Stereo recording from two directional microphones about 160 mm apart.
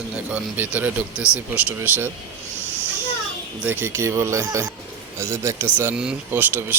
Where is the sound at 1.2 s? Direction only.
15° left (ahead or behind).